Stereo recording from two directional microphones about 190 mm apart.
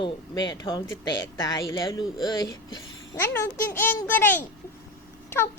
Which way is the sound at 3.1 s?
15° left (ahead or behind).